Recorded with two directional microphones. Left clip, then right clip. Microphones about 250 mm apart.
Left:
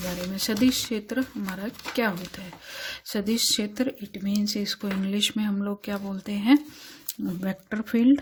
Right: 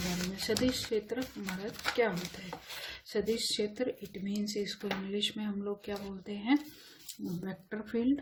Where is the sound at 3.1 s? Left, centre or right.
Left.